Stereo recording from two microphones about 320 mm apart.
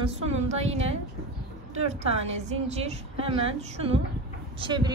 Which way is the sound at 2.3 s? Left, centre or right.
Centre.